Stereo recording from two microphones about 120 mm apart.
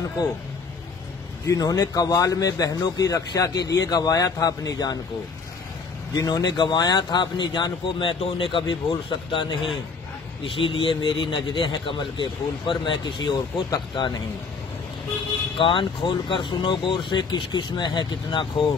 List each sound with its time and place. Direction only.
1.4 s speech: 30° left (ahead or behind)
6.1 s speech: 30° left (ahead or behind)
15.5 s speech: 45° left (ahead or behind)